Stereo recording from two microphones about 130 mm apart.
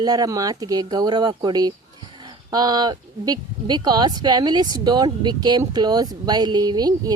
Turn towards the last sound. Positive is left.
turn(degrees=-30)  # may be behind; listen again after turning